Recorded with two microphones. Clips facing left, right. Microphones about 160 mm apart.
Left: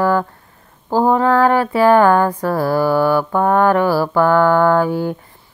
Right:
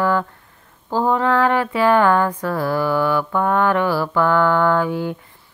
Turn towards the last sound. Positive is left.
turn(degrees=40)  # may be behind; listen again after turning